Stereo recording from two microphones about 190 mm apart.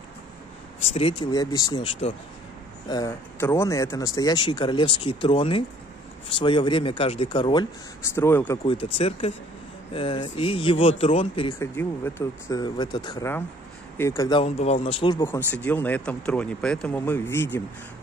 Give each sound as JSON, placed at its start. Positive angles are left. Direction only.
{"t": 0.8, "sound": "speech", "side_deg": 30}
{"t": 2.9, "sound": "speech", "side_deg": 15}
{"t": 8.1, "sound": "speech", "side_deg": 10}
{"t": 8.8, "sound": "speech", "side_deg": 30}
{"t": 11.6, "sound": "speech", "side_deg": 10}
{"t": 14.4, "sound": "speech", "side_deg": 30}
{"t": 15.2, "sound": "speech", "side_deg": 10}